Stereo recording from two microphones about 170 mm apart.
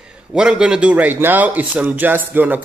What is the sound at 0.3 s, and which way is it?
Speech, 5° right (ahead or behind).